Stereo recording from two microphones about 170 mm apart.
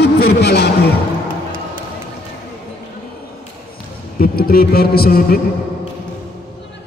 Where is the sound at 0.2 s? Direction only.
80° left.